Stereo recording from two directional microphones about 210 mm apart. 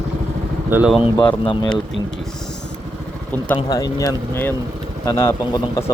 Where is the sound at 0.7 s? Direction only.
5° right (ahead or behind).